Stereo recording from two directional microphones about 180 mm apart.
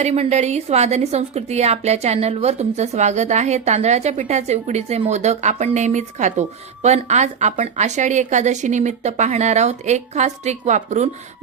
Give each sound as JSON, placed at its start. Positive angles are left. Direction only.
{"t": 0.0, "sound": "a woman's voice", "side_deg": -35}